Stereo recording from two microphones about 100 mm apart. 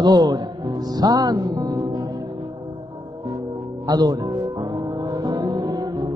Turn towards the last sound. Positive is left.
turn(degrees=-50)  # may be behind; listen again after turning